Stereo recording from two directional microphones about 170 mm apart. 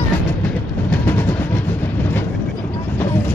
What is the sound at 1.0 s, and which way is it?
Percussion, 10° left (ahead or behind).